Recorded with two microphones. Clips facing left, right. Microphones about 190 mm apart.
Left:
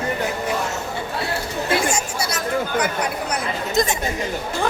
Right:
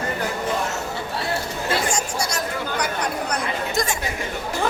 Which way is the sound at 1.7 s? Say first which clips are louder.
Left 2 dB; 10° left (ahead or behind).